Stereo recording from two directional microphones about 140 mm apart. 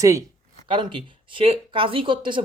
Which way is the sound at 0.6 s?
35° right (ahead or behind).